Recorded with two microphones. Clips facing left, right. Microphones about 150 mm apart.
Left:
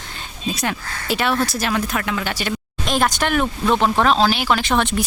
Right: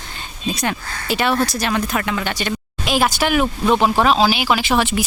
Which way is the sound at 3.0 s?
5° right (ahead or behind).